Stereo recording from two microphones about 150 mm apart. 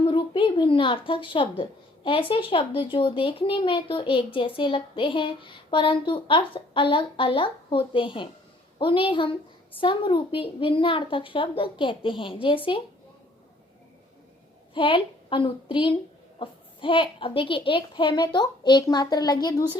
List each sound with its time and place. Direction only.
0.1 s a child's voice: 35° left (ahead or behind)
14.7 s a woman's voice: 35° left (ahead or behind)